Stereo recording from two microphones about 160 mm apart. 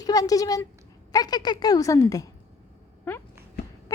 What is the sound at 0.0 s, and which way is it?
A woman's voice, 25° left (ahead or behind).